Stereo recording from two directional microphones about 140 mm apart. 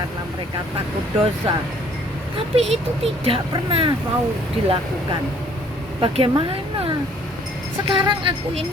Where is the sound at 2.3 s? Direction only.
45° right (ahead or behind).